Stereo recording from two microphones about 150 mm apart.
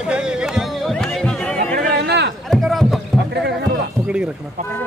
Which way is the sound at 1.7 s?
90° right.